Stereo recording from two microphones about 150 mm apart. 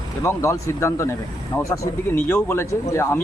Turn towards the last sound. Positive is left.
turn(degrees=15)  # may be behind; listen again after turning